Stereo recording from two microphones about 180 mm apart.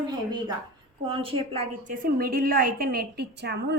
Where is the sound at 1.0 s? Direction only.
30° right (ahead or behind).